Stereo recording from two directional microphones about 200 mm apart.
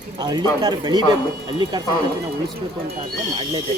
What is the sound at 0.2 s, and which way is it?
Speech, 20° right (ahead or behind).